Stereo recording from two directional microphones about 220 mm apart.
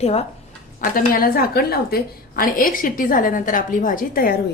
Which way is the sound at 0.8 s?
40° left (ahead or behind).